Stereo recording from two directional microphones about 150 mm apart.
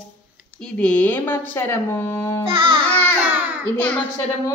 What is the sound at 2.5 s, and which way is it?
Music, 35° right (ahead or behind).